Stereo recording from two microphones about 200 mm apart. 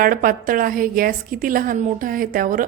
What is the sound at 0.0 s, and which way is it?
A woman's voice, 45° right (ahead or behind).